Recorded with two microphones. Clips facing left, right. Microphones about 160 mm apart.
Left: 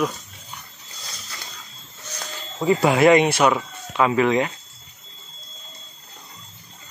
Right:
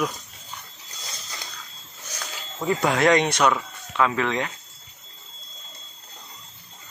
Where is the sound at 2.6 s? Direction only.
5° left (ahead or behind).